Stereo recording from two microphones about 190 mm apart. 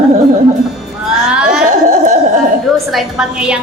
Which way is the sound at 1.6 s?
40° right (ahead or behind).